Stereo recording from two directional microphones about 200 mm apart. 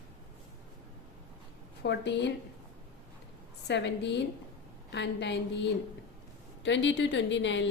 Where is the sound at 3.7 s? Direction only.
60° left (ahead or behind).